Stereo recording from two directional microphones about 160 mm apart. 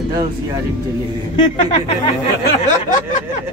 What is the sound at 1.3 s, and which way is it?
Speech, 30° left (ahead or behind).